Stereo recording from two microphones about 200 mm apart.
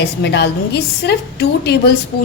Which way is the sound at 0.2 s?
55° left (ahead or behind).